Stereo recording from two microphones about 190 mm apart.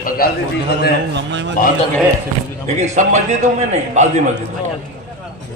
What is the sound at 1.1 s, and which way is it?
Speech, 70° right (ahead or behind).